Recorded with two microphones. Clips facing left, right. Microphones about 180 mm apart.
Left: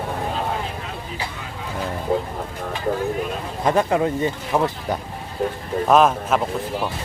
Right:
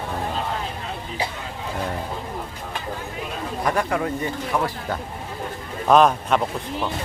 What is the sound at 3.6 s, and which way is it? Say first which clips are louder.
Speech: left 5 dB; 25° left (ahead or behind).